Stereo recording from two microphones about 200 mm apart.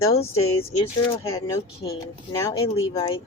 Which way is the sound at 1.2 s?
15° left (ahead or behind).